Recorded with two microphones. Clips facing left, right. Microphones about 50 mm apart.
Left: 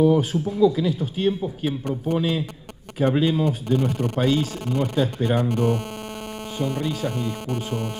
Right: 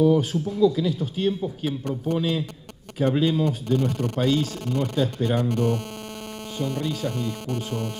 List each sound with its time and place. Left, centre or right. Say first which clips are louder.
0.0 s a man's voice: left 1 dB; centre